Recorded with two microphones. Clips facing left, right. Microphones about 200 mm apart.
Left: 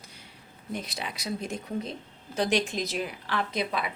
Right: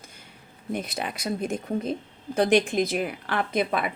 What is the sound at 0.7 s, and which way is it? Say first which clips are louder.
A woman's voice: right 5 dB; 55° right (ahead or behind).